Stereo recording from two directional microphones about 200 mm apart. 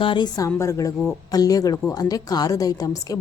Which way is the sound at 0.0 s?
25° left (ahead or behind).